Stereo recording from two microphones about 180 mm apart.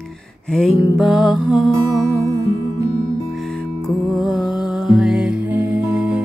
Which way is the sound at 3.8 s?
Centre (ahead or behind).